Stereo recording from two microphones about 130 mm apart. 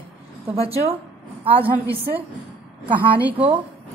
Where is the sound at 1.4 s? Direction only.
45° right (ahead or behind).